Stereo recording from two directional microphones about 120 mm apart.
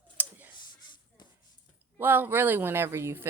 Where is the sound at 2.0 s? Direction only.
15° right (ahead or behind).